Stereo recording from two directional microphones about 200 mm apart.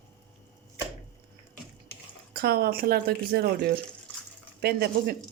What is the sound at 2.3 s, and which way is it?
Speech, 50° right (ahead or behind).